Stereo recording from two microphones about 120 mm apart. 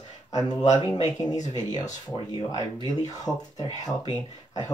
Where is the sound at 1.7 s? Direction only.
30° left (ahead or behind).